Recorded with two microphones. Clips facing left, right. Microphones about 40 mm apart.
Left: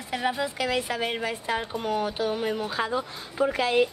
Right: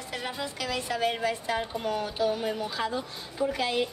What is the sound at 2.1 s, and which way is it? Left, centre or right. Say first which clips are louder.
A woman's voice: left 1 dB; left.